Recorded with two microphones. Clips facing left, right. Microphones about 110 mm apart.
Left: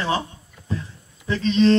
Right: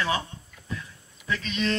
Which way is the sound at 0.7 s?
30° left (ahead or behind).